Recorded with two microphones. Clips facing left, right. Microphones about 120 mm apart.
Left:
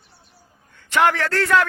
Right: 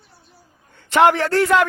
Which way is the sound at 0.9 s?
20° right (ahead or behind).